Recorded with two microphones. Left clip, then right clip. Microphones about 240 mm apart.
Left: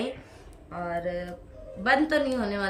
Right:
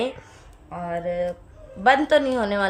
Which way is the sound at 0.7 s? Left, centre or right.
Right.